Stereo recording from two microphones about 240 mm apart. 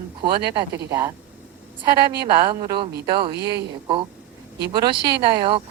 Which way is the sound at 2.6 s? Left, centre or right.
Centre.